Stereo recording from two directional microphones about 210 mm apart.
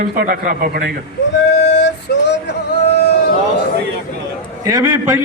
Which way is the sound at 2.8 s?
50° left (ahead or behind).